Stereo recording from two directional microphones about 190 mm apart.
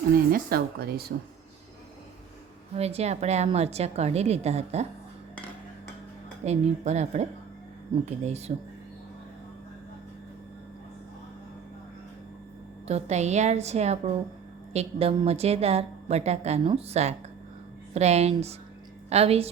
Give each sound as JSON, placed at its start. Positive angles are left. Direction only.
{"t": 0.3, "sound": "speech", "side_deg": -50}
{"t": 2.7, "sound": "a woman's voice", "side_deg": -35}
{"t": 6.4, "sound": "a woman's voice", "side_deg": -35}
{"t": 12.9, "sound": "a woman's voice", "side_deg": -35}